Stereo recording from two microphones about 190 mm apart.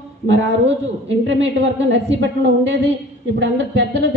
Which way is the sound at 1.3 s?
70° right (ahead or behind).